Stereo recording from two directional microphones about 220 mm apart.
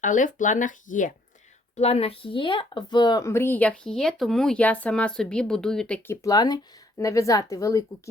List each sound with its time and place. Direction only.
0.0 s speech: 35° left (ahead or behind); by 6.1 s 5° left (ahead or behind)
6.2 s speech: 15° left (ahead or behind)